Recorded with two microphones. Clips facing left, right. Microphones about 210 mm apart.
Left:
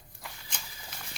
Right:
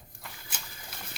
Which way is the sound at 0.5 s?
5° right (ahead or behind).